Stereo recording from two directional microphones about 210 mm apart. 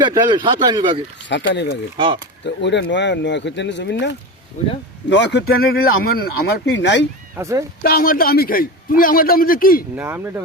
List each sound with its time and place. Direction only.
0.0 s a man's voice: 20° right (ahead or behind)
1.3 s speech: 55° left (ahead or behind)
4.6 s speech: 35° left (ahead or behind)
5.0 s speech: 55° left (ahead or behind)
7.3 s speech: 15° right (ahead or behind)
7.8 s speech: 45° left (ahead or behind)
9.9 s speech: 10° right (ahead or behind)